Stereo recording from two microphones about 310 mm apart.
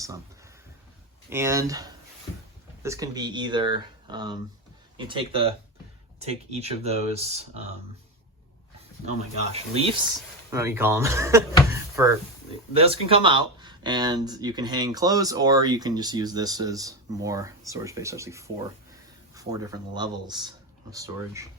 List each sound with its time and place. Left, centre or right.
1.3 s speech: centre
9.5 s speech: centre
10.5 s speech: centre
11.7 s drawer open or close: centre
12.7 s speech: centre